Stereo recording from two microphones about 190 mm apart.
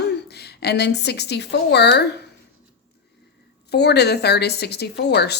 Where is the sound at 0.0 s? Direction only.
60° left (ahead or behind).